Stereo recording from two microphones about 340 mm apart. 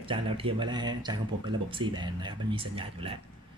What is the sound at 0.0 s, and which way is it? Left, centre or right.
Speech, centre.